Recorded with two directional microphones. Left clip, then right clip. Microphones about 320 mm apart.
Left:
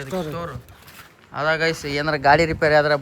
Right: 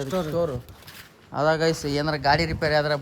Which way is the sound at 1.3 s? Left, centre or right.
Centre.